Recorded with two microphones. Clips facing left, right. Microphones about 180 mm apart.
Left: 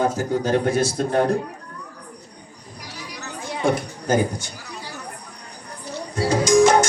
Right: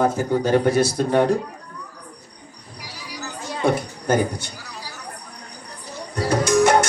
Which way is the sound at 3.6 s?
65° right (ahead or behind).